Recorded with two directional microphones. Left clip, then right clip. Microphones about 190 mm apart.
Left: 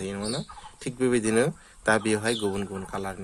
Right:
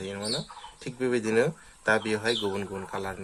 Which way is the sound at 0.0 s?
40° left (ahead or behind).